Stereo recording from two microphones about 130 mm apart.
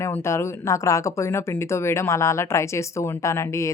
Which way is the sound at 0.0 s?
20° left (ahead or behind).